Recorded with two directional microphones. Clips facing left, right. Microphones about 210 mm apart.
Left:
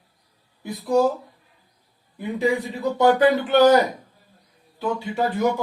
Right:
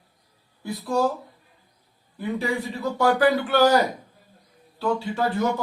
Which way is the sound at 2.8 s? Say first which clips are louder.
Left 3 dB; 20° left (ahead or behind).